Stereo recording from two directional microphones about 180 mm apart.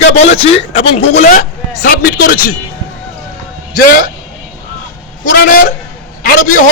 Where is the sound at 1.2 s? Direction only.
45° left (ahead or behind).